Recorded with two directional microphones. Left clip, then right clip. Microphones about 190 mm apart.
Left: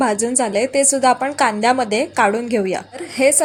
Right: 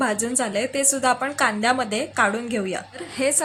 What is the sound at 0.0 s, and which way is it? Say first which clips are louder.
A woman's voice: left 6 dB; 15° left (ahead or behind).